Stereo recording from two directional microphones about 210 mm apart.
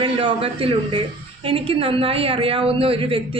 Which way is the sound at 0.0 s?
25° right (ahead or behind).